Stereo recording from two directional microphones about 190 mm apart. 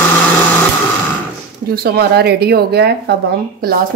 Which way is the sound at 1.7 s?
55° right (ahead or behind).